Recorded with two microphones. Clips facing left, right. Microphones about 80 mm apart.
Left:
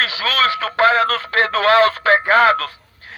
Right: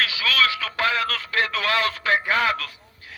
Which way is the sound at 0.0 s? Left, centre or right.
Left.